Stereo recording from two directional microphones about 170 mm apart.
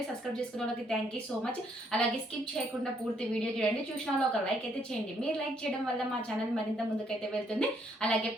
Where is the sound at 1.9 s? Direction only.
5° left (ahead or behind).